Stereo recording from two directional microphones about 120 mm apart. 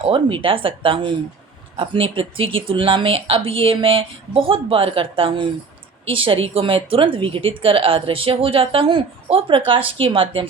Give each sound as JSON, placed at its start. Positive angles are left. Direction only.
{"t": 0.0, "sound": "a woman's voice", "side_deg": -45}